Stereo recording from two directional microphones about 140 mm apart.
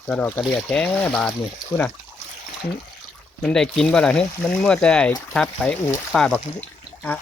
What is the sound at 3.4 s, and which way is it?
Speech, 5° left (ahead or behind).